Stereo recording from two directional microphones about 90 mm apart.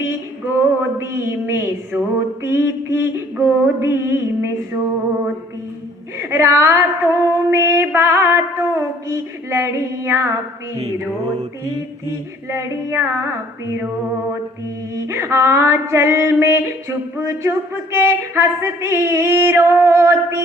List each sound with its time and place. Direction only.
0.0 s a sound: 25° right (ahead or behind)
2.1 s music: 25° right (ahead or behind)
6.1 s speech: 30° right (ahead or behind)
7.3 s music: 30° right (ahead or behind)
12.5 s speech: 30° right (ahead or behind)
13.0 s music: 25° right (ahead or behind)
14.9 s music: 30° right (ahead or behind)
17.2 s speech: 30° right (ahead or behind)